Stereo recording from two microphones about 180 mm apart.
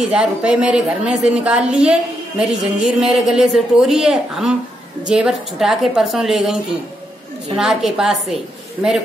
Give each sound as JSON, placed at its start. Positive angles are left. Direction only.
{"t": 0.0, "sound": "a woman's voice", "side_deg": -5}